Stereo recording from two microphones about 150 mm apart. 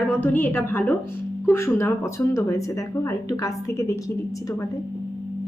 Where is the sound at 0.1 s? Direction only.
10° left (ahead or behind).